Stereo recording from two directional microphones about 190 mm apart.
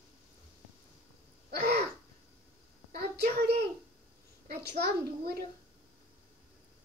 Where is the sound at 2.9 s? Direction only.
55° right (ahead or behind).